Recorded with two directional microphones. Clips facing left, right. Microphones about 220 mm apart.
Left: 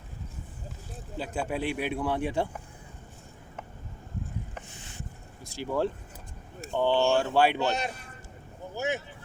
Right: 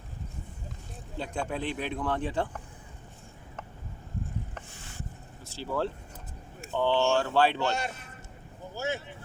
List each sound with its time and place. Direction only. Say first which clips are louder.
1.2 s a man's voice: left 2 dB; 5° left (ahead or behind)
5.5 s a man's voice: left 3 dB; 15° left (ahead or behind)